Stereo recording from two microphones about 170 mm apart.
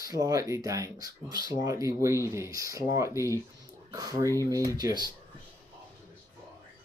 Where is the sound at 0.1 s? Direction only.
20° right (ahead or behind).